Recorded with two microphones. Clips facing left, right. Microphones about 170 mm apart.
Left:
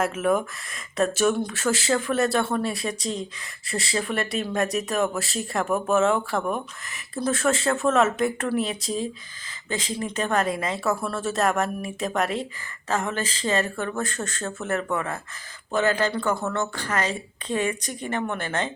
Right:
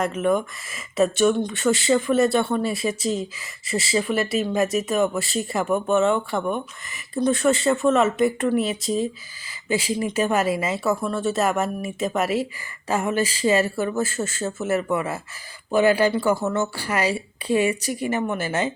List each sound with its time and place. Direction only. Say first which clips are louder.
0.0 s speech: right 1 dB; 5° left (ahead or behind)